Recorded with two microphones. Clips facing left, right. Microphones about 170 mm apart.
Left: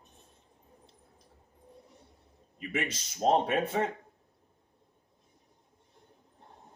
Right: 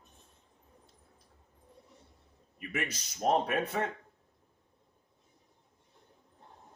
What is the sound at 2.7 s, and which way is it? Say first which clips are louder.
Speech: left 3 dB; 25° left (ahead or behind).